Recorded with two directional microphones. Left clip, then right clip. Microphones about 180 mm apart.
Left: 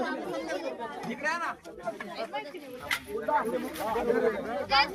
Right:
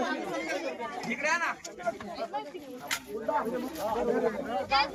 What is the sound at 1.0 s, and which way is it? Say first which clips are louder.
Speech: right 3 dB; 30° left (ahead or behind).